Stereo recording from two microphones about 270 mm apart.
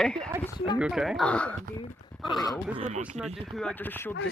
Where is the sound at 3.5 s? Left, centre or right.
Centre.